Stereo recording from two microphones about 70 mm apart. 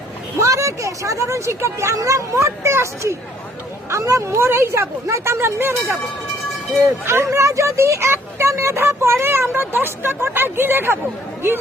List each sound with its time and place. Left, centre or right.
0.3 s speech: right
4.3 s speech: right
7.1 s speech: right